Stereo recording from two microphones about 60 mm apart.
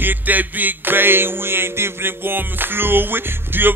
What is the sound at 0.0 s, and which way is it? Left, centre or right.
Music, right.